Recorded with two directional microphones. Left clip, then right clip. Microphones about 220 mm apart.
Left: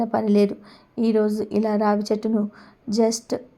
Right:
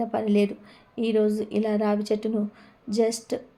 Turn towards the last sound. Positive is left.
turn(degrees=25)  # may be behind; listen again after turning